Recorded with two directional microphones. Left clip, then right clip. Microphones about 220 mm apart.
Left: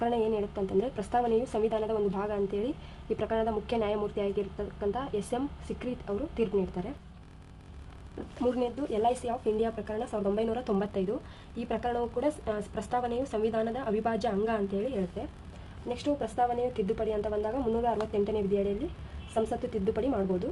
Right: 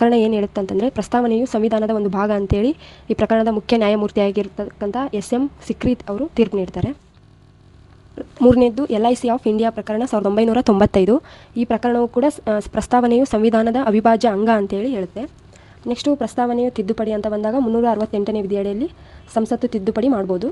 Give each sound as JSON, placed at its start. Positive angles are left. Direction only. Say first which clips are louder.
{"t": 0.0, "sound": "a woman's voice", "louder": "right 13 dB", "side_deg": -45}
{"t": 8.4, "sound": "a woman's voice", "louder": "right 16 dB", "side_deg": -45}